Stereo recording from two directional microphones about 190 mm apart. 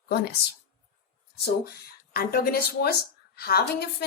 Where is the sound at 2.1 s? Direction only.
50° left (ahead or behind).